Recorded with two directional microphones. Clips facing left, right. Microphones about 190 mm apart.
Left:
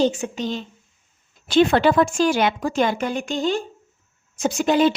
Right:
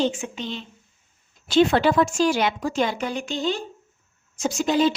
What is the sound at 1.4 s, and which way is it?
A woman's voice, 55° left (ahead or behind).